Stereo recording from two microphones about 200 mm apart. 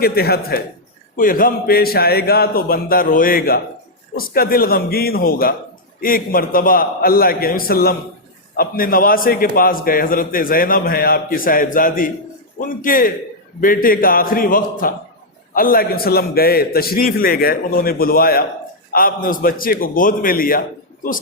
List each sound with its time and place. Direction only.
0.0 s a man's voice: 50° left (ahead or behind)